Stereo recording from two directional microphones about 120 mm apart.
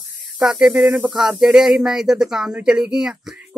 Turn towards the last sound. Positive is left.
turn(degrees=-10)  # may be behind; listen again after turning